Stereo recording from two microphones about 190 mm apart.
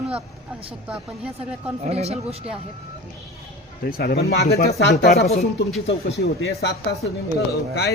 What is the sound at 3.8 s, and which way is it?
Speech, 55° left (ahead or behind).